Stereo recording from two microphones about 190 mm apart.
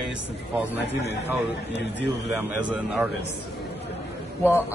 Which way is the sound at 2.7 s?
5° right (ahead or behind).